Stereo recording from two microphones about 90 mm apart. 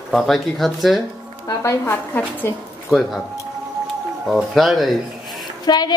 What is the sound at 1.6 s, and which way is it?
Speech, 35° left (ahead or behind).